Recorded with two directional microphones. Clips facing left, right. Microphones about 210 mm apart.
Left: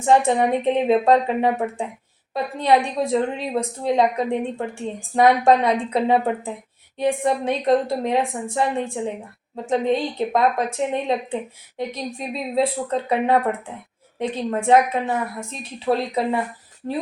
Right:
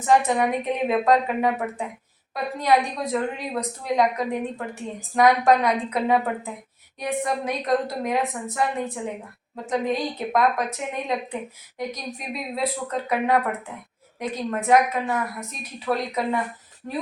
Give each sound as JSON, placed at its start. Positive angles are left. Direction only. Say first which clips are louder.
{"t": 0.0, "sound": "a woman's voice", "louder": "left 3 dB", "side_deg": 30}